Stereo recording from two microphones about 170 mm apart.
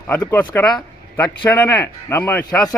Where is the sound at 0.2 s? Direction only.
15° left (ahead or behind).